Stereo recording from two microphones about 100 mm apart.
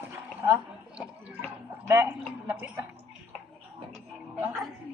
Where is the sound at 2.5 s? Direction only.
20° right (ahead or behind).